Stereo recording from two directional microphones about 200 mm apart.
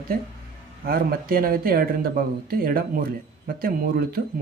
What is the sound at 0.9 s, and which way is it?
Speech, 45° right (ahead or behind).